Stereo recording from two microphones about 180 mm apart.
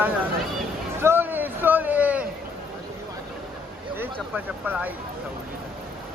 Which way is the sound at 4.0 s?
10° right (ahead or behind).